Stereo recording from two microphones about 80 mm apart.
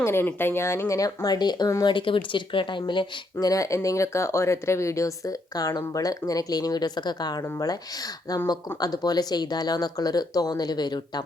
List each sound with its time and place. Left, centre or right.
0.0 s speech: left
1.8 s speech: left
3.4 s speech: left